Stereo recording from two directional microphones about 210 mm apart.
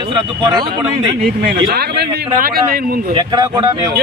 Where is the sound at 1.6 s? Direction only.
50° right (ahead or behind).